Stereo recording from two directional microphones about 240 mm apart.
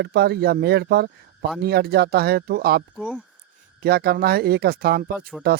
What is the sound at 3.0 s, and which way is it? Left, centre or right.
Speech, centre.